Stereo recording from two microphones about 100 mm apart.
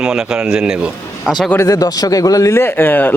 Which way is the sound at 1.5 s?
30° left (ahead or behind).